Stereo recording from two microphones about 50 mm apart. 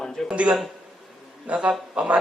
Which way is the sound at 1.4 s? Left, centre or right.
Right.